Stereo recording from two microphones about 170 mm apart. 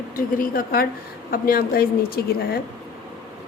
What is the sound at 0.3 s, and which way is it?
A woman's voice, 55° left (ahead or behind).